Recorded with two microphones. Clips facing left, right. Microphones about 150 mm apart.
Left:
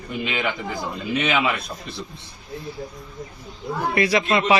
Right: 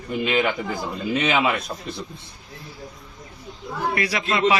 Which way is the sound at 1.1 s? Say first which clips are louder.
Right 1 dB; 35° right (ahead or behind).